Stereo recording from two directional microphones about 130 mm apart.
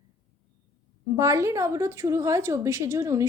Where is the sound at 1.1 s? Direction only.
25° right (ahead or behind).